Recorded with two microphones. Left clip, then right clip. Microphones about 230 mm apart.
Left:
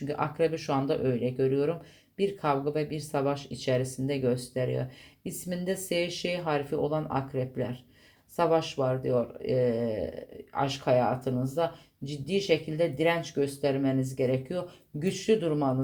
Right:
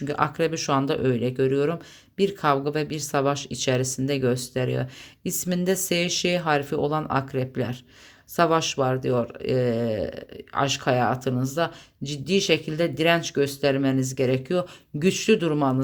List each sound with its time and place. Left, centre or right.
0.0 s speech: right